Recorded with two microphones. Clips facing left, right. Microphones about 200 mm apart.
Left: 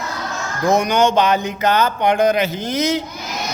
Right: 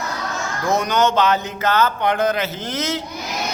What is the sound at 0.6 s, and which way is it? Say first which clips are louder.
A man's voice: left 3 dB; 15° left (ahead or behind).